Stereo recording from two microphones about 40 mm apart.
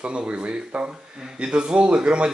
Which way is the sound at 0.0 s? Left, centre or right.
Right.